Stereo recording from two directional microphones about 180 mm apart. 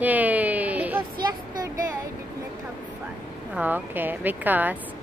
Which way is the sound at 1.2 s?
20° right (ahead or behind).